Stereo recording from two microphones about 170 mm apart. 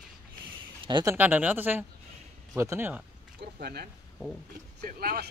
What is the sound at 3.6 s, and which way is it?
Speech, 70° right (ahead or behind).